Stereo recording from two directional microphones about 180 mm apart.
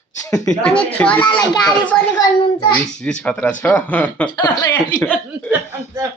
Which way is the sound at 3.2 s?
5° left (ahead or behind).